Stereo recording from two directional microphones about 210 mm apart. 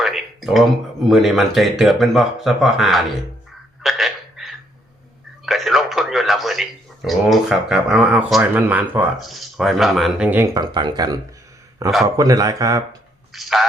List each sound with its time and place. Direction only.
0.0 s speech: centre (ahead or behind)
3.8 s hiccup: centre (ahead or behind)
5.5 s speech: centre (ahead or behind)
10.5 s speech: 20° right (ahead or behind)
13.3 s speech: centre (ahead or behind)